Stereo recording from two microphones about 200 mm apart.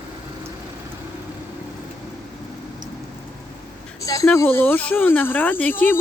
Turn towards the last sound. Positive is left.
turn(degrees=10)  # may be behind; listen again after turning